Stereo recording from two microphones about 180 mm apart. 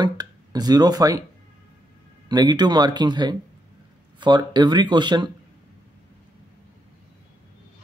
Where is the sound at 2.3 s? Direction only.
25° right (ahead or behind).